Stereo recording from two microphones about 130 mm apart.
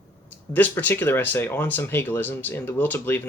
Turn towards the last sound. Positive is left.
turn(degrees=15)  # may be behind; listen again after turning